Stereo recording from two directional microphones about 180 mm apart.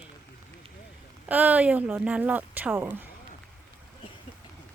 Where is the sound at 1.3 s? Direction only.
10° right (ahead or behind).